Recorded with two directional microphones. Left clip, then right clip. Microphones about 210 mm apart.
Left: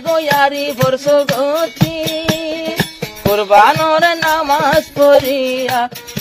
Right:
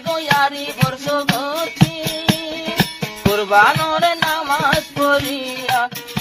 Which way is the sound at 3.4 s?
55° left (ahead or behind).